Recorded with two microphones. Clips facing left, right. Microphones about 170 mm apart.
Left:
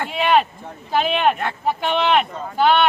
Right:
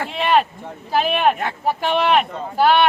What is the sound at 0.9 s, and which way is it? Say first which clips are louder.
Speech: right 1 dB; 5° right (ahead or behind).